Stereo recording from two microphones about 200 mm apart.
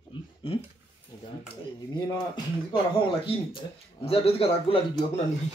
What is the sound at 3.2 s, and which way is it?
Speech, 25° left (ahead or behind).